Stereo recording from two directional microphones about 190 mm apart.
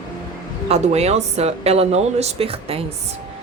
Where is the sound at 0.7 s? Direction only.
35° right (ahead or behind).